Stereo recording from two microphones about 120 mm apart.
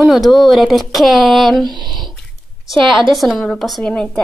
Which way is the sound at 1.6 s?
35° right (ahead or behind).